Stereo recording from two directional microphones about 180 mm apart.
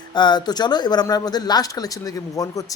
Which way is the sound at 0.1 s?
25° left (ahead or behind).